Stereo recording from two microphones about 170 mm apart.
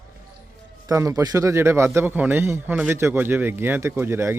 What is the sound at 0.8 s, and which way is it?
Speech, 20° right (ahead or behind).